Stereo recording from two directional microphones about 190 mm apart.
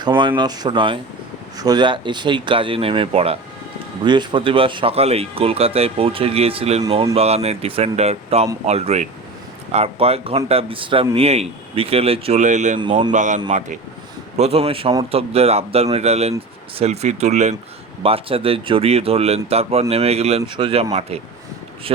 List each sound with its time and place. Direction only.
0.0 s speech: 25° right (ahead or behind)